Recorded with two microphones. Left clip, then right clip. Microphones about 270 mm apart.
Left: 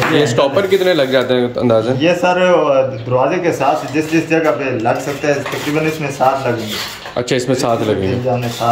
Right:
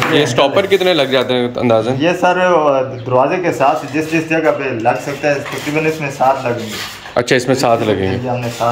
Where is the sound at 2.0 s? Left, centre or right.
Centre.